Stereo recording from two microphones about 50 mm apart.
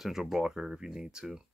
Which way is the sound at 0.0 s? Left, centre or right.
Centre.